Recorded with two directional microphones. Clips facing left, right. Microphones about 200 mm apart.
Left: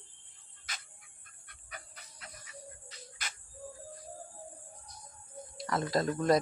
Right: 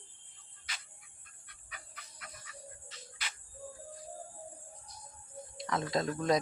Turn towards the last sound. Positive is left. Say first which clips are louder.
# left 2 dB
turn(degrees=0)  # may be behind; listen again after turning